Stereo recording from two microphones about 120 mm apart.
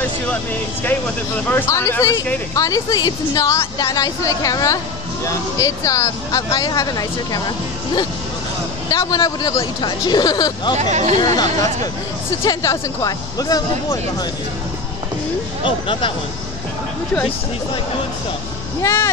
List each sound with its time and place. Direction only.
0.8 s a woman's voice: 15° left (ahead or behind); by 10.8 s 35° left (ahead or behind)
10.8 s speech: 70° right (ahead or behind)
11.1 s speech: 35° left (ahead or behind)
15.6 s speech: 45° left (ahead or behind)
18.8 s a woman's voice: 25° left (ahead or behind)